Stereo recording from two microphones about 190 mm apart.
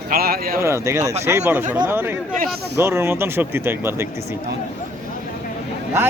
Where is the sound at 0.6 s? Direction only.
15° right (ahead or behind).